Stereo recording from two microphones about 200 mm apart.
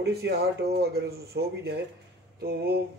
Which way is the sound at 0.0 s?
55° right (ahead or behind).